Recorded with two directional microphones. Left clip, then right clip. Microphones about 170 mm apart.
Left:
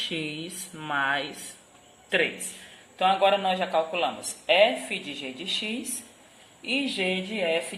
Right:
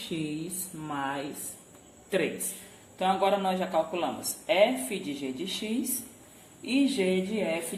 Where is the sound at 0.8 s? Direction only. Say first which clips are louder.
Left 7 dB; 40° left (ahead or behind).